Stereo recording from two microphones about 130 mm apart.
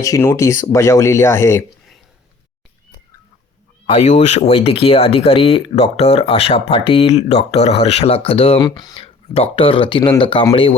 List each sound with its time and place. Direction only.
0.0 s speech: 25° left (ahead or behind)
3.8 s speech: 60° left (ahead or behind)
8.6 s speech: 30° left (ahead or behind)
9.0 s speech: 50° left (ahead or behind)